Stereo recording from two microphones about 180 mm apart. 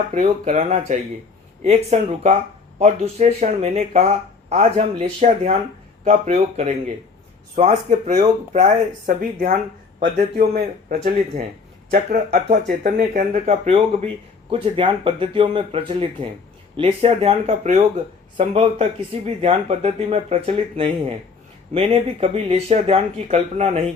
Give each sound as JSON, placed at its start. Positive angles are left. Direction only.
{"t": 0.1, "sound": "a man's voice", "side_deg": -40}
{"t": 10.6, "sound": "speech", "side_deg": -45}